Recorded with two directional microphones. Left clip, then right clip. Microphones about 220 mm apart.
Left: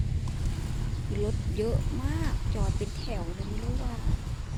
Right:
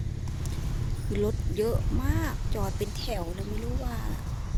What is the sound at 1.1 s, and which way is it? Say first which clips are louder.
Speech: right 4 dB; 25° right (ahead or behind).